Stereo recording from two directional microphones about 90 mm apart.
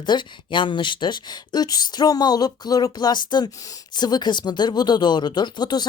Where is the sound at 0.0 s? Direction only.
60° left (ahead or behind).